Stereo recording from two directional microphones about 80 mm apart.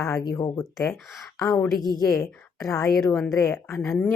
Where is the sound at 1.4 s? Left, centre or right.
Left.